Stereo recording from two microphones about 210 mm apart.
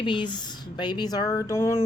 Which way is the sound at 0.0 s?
20° left (ahead or behind).